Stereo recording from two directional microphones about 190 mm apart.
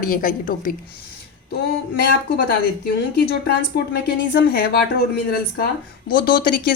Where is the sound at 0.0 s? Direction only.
45° left (ahead or behind).